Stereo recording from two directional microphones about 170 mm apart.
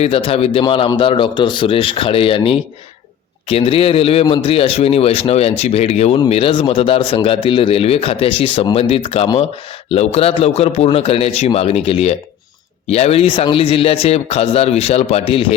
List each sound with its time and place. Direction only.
0.0 s a man's voice: 35° left (ahead or behind)